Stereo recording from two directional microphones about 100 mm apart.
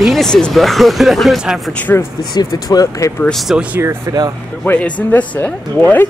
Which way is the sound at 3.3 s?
Centre (ahead or behind).